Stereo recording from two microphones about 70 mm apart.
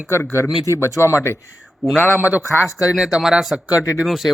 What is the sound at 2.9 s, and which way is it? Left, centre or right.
A man's voice, centre.